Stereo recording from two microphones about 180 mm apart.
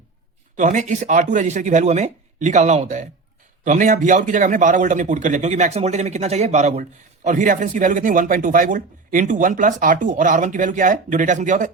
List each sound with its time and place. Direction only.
0.5 s speech: 45° right (ahead or behind)